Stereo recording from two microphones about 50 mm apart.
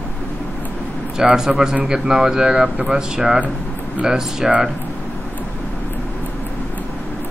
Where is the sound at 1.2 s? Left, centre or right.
Centre.